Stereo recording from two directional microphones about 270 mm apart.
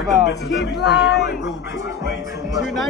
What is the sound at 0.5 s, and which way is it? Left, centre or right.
Speech, left.